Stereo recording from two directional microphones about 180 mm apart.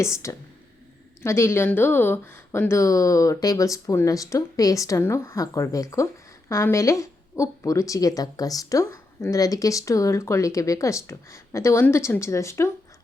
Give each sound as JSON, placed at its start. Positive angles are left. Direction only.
{"t": 0.0, "sound": "a woman's voice", "side_deg": 15}